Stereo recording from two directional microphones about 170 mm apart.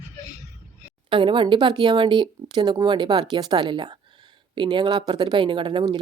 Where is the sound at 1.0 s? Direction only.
30° right (ahead or behind).